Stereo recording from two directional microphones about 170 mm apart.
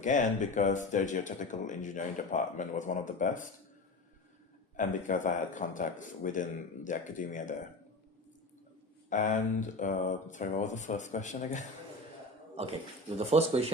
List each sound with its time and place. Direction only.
0.0 s speech: 45° left (ahead or behind)
4.8 s speech: 50° left (ahead or behind)
9.0 s speech: 50° left (ahead or behind)
13.1 s speech: 35° right (ahead or behind)